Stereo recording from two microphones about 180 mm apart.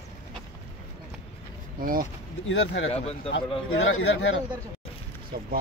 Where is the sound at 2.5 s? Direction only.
90° left.